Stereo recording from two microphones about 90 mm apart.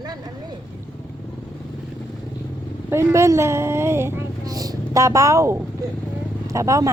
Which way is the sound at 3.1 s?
35° right (ahead or behind).